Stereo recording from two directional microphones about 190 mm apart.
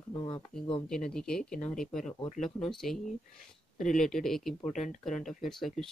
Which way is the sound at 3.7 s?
40° left (ahead or behind).